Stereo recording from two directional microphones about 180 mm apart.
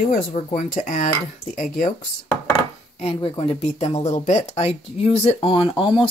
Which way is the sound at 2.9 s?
30° left (ahead or behind).